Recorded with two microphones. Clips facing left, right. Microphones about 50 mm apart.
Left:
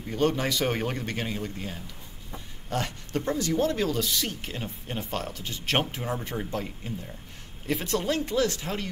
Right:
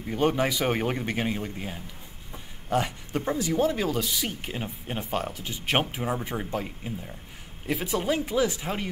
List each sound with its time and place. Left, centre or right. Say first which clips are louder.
0.0 s speech: right 1 dB; centre